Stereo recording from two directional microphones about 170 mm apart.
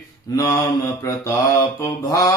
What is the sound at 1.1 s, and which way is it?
Mantra, 15° left (ahead or behind).